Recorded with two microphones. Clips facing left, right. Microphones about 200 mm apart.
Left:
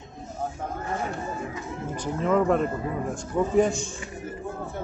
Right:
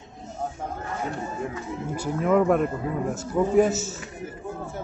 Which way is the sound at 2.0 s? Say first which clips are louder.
Right 2 dB; 10° right (ahead or behind).